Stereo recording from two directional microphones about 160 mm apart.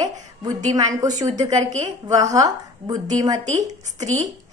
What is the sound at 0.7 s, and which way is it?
Speech, 20° right (ahead or behind).